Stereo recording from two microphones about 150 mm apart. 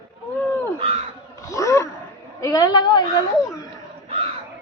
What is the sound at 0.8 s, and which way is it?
Speech, 40° right (ahead or behind).